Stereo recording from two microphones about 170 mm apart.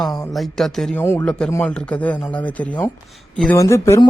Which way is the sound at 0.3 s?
Centre (ahead or behind).